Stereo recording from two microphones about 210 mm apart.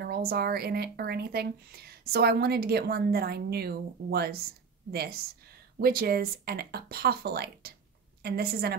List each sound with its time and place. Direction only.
0.0 s speech: 45° right (ahead or behind)
5.8 s speech: 45° right (ahead or behind)